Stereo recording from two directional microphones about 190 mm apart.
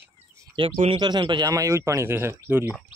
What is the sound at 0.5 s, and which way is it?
Speech, 30° right (ahead or behind).